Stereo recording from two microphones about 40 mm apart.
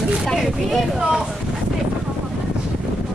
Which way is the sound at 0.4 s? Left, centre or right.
Centre.